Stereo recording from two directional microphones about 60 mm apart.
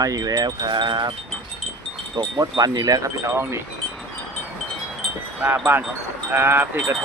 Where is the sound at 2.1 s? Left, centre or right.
Right.